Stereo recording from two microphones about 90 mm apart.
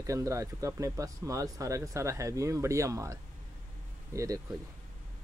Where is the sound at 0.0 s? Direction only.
35° right (ahead or behind).